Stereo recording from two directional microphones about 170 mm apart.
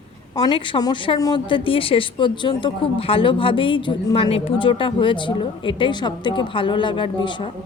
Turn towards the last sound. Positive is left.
turn(degrees=30)  # may be behind; listen again after turning